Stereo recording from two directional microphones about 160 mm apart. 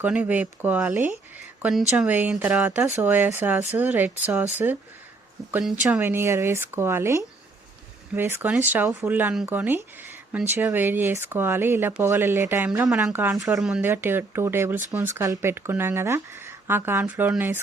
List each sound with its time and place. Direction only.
0.0 s speech: 10° right (ahead or behind)
13.6 s speech: 5° right (ahead or behind)